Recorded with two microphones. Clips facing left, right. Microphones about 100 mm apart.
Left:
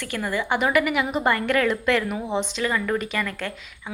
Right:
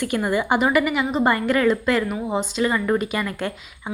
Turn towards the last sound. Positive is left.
turn(degrees=-20)  # may be behind; listen again after turning